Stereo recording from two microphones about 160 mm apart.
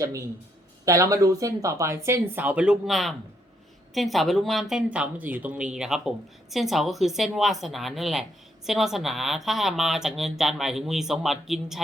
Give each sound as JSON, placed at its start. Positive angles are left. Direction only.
{"t": 0.9, "sound": "speech", "side_deg": -20}